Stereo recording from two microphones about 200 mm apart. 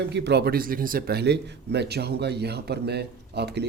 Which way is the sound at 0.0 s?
55° right (ahead or behind).